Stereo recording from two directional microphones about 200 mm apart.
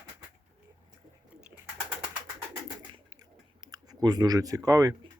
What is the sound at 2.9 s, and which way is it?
Clicking, 20° right (ahead or behind).